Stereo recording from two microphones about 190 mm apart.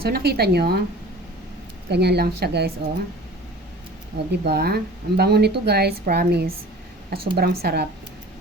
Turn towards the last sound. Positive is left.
turn(degrees=-55)  # may be behind; listen again after turning